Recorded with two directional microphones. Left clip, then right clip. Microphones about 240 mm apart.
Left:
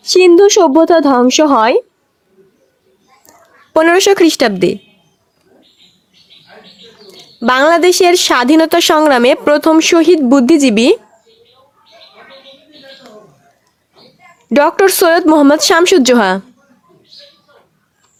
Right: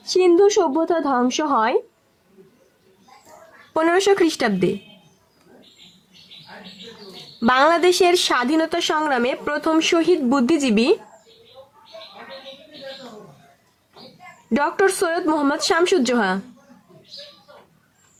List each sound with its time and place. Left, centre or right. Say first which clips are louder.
0.0 s speech: left 9 dB; left
3.7 s speech: left 9 dB; left
7.3 s speech: left 7 dB; left
14.5 s speech: left 10 dB; left